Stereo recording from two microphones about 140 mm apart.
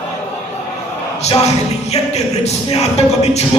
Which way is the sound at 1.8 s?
50° left (ahead or behind).